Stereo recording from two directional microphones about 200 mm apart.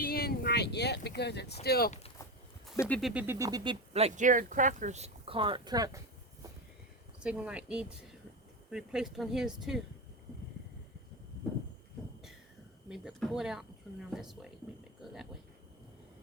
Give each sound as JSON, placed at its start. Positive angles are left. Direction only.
{"t": 0.0, "sound": "a sound", "side_deg": 50}
{"t": 1.6, "sound": "speech", "side_deg": 50}
{"t": 2.9, "sound": "speech", "side_deg": 0}
{"t": 7.2, "sound": "speech", "side_deg": -5}
{"t": 12.9, "sound": "speech", "side_deg": 0}
{"t": 15.0, "sound": "a sound", "side_deg": 0}